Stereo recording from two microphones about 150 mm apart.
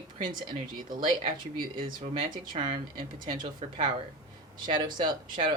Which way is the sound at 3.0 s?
30° right (ahead or behind).